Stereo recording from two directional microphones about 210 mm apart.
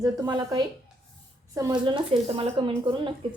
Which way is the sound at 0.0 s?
20° right (ahead or behind).